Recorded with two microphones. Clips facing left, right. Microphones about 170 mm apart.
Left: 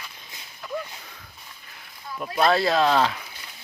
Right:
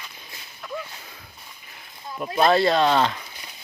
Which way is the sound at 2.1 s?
20° right (ahead or behind).